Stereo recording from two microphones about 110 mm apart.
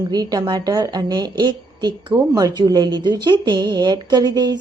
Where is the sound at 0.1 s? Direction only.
35° right (ahead or behind).